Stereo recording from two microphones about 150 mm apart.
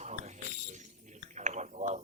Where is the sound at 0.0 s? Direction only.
50° right (ahead or behind).